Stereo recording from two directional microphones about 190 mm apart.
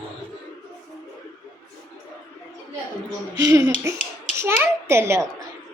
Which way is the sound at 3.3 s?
20° right (ahead or behind).